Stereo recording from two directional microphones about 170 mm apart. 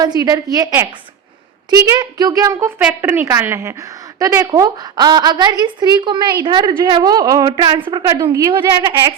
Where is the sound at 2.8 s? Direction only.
10° right (ahead or behind).